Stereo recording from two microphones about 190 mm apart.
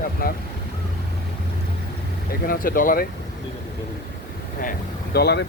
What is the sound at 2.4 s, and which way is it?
Speech, 50° left (ahead or behind).